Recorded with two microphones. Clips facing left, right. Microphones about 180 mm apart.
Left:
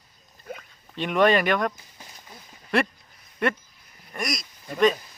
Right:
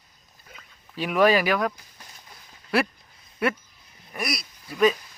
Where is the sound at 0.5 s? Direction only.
55° left (ahead or behind).